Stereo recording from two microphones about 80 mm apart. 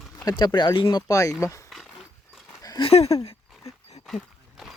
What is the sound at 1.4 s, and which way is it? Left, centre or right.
Speech, left.